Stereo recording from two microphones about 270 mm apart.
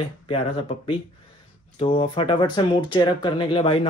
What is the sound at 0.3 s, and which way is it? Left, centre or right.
Speech, left.